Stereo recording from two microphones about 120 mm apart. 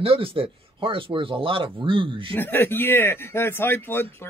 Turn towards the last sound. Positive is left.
turn(degrees=20)  # may be behind; listen again after turning